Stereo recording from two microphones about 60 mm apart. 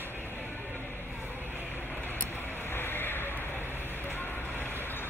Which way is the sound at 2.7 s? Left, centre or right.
Left.